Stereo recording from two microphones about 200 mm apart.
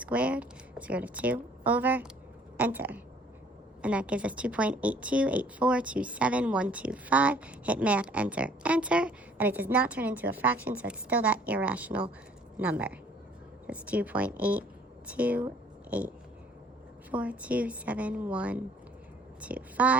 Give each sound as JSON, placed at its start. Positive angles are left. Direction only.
{"t": 0.0, "sound": "a woman's voice", "side_deg": -5}